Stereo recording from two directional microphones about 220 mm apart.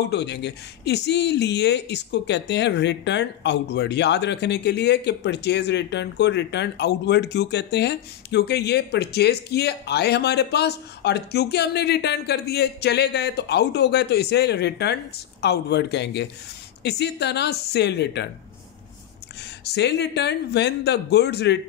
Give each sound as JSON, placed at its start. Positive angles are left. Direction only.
{"t": 0.1, "sound": "speech", "side_deg": 50}
{"t": 19.6, "sound": "speech", "side_deg": 50}